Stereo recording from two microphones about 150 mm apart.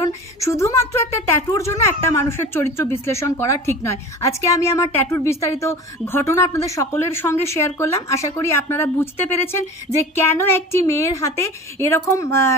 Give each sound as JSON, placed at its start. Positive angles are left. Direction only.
{"t": 0.0, "sound": "a woman's voice", "side_deg": 20}